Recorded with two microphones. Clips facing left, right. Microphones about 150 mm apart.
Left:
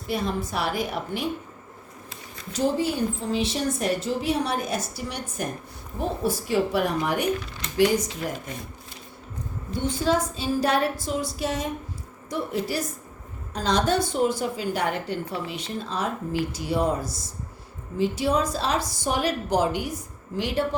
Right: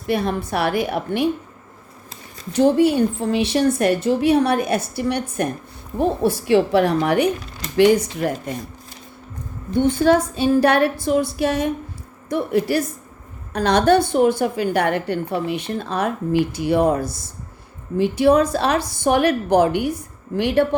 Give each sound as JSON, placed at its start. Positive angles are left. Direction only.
{"t": 0.1, "sound": "a woman's voice", "side_deg": -65}
{"t": 2.5, "sound": "a woman's voice", "side_deg": -65}
{"t": 6.5, "sound": "a woman's voice", "side_deg": -70}
{"t": 9.8, "sound": "a woman's voice", "side_deg": -60}